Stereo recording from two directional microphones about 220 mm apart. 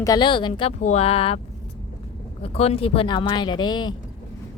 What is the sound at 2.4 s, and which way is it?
Speech, 25° left (ahead or behind).